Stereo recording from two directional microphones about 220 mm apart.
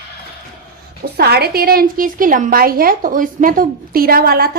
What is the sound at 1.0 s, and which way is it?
A woman's voice, 45° right (ahead or behind).